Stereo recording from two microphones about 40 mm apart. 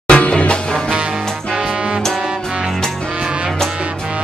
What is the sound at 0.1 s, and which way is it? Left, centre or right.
Music, left.